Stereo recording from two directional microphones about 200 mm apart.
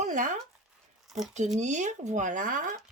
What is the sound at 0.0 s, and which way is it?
Zipper, 40° right (ahead or behind).